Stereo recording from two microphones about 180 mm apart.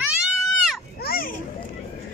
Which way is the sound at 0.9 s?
55° left (ahead or behind).